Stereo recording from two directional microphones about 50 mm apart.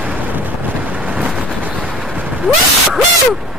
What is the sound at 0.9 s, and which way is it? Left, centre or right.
Thunder, right.